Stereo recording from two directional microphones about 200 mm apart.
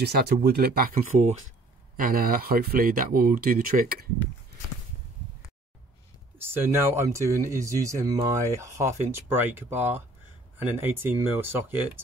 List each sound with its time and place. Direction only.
0.0 s speech: 50° right (ahead or behind)
6.3 s speech: 10° right (ahead or behind)